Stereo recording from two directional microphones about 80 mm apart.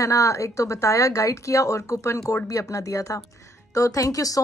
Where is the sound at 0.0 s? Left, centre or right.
Left.